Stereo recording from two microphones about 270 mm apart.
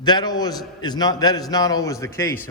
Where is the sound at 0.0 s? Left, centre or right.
Centre.